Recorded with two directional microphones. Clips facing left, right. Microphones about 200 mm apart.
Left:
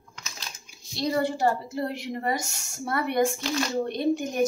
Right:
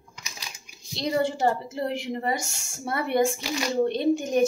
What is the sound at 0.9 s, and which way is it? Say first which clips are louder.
A woman's voice: even; 25° right (ahead or behind).